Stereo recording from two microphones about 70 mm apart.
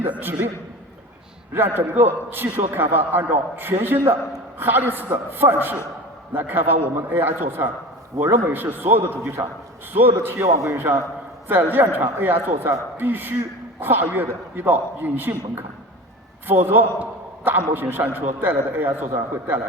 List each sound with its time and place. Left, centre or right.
0.0 s a man's voice: right
1.5 s a man's voice: right
10.4 s a man's voice: right
11.4 s a man's voice: right